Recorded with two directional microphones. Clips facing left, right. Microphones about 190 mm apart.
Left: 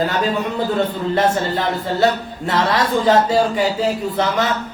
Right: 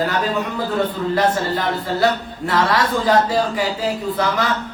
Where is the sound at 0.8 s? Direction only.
25° left (ahead or behind).